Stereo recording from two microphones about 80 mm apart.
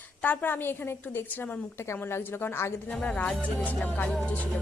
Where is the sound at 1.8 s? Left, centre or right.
Left.